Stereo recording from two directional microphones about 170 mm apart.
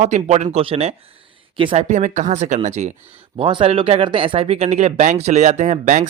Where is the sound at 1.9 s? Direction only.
45° right (ahead or behind).